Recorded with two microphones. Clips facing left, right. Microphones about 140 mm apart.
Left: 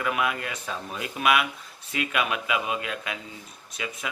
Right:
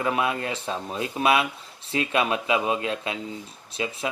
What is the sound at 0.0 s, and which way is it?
Speech, 30° right (ahead or behind).